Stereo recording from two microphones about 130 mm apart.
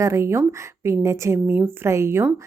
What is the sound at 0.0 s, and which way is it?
Speech, 20° right (ahead or behind).